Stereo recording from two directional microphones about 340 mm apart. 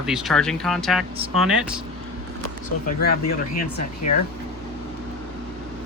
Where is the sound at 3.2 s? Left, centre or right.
Left.